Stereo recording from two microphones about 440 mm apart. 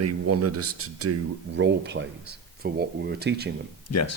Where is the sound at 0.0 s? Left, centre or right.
Right.